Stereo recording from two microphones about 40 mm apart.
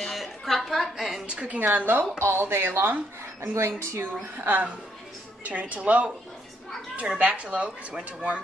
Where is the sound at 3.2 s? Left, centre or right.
Right.